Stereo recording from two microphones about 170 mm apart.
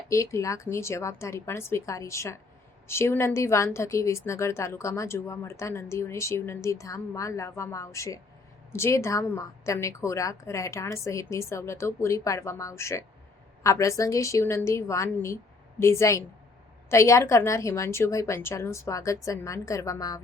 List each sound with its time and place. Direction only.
0.1 s a woman's voice: 15° left (ahead or behind)